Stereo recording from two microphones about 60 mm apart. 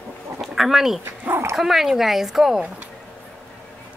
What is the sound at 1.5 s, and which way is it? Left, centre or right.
Speech, centre.